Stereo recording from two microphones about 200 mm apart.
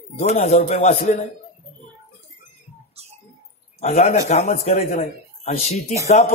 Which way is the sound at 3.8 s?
35° left (ahead or behind).